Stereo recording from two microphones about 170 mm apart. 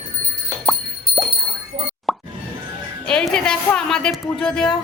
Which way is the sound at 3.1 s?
5° left (ahead or behind).